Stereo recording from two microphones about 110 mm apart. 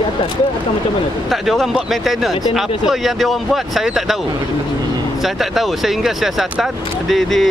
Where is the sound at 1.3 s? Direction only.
Centre (ahead or behind).